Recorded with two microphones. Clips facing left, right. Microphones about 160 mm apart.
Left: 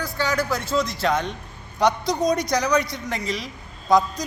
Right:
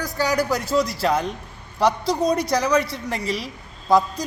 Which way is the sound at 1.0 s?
5° right (ahead or behind).